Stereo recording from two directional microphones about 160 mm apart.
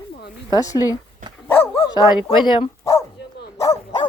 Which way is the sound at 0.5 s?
20° left (ahead or behind).